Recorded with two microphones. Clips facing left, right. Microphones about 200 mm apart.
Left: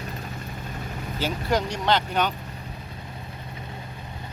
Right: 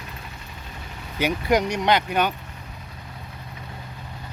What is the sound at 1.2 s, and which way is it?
Speech, 15° right (ahead or behind).